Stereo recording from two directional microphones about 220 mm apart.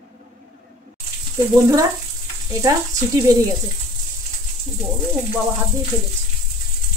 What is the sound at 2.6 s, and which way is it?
Stir, 15° right (ahead or behind).